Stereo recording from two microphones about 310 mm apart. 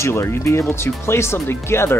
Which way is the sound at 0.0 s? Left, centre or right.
Centre.